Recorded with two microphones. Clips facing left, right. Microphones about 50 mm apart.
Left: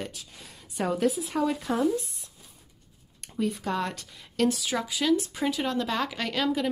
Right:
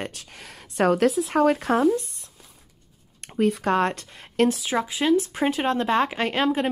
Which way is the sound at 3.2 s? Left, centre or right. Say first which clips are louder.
Right 7 dB; right.